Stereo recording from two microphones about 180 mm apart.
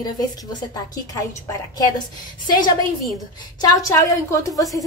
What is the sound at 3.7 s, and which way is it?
Speech, 15° left (ahead or behind).